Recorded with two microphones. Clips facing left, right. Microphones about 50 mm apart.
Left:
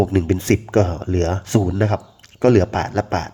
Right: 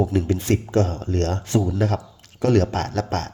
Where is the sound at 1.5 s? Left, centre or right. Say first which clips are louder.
Left 2 dB; left.